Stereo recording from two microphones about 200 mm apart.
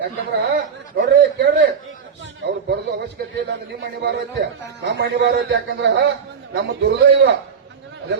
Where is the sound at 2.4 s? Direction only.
60° right (ahead or behind).